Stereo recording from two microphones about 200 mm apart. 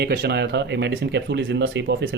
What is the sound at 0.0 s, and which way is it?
Speech, 55° right (ahead or behind).